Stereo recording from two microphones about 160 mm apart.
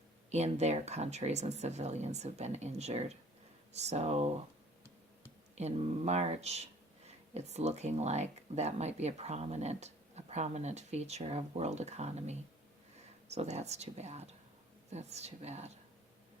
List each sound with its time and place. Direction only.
0.3 s speech: 45° right (ahead or behind)
5.5 s speech: 45° right (ahead or behind)